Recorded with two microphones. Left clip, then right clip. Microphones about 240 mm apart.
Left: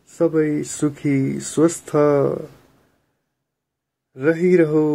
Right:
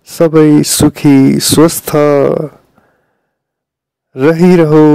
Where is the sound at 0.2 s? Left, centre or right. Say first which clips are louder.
Right 12 dB; right.